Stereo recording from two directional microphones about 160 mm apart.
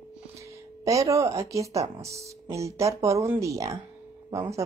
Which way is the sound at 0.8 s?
20° right (ahead or behind).